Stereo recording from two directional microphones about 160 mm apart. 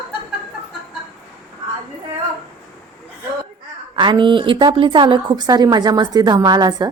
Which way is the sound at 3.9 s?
30° right (ahead or behind).